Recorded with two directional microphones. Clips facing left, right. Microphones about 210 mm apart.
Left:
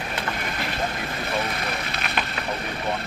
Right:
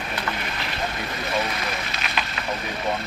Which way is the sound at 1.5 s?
50° left (ahead or behind).